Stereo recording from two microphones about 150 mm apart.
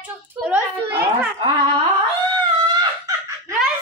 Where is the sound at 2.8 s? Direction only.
20° right (ahead or behind).